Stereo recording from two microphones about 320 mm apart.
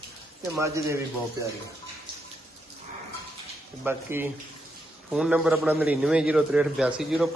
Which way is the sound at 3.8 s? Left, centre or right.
Centre.